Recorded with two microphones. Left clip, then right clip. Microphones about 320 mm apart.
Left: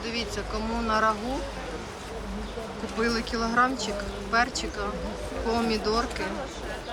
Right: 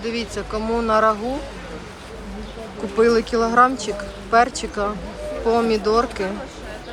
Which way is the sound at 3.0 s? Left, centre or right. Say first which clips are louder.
Right 11 dB; centre.